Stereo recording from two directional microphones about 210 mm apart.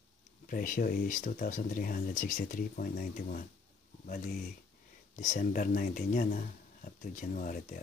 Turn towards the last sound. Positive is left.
turn(degrees=40)  # may be behind; listen again after turning